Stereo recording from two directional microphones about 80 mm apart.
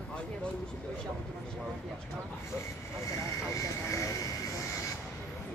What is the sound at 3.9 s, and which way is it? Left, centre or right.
Vehicle, left.